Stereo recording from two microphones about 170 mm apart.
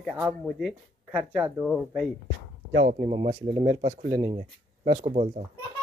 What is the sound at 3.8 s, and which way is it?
Speech, 40° right (ahead or behind).